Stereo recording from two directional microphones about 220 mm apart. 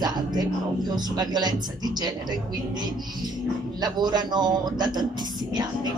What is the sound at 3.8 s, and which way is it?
Speech, 20° right (ahead or behind).